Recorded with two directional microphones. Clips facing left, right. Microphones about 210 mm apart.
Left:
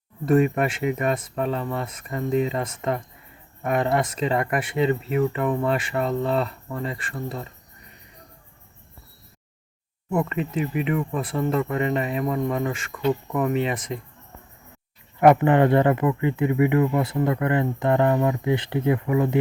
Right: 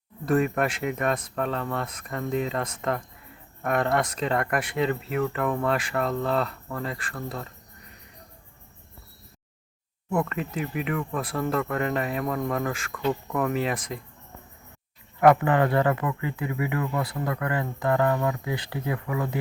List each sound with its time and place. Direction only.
0.3 s speech: 5° left (ahead or behind)
10.1 s speech: 5° left (ahead or behind)
15.2 s speech: 25° left (ahead or behind)